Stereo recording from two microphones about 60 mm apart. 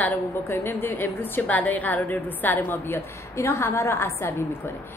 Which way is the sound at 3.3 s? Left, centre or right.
Left.